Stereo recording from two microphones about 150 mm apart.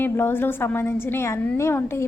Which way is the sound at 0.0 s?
15° left (ahead or behind).